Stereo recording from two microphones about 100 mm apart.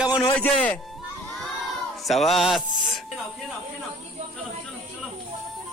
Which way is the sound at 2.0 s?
Centre (ahead or behind).